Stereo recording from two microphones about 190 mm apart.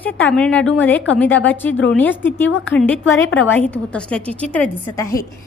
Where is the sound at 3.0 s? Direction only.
90° left.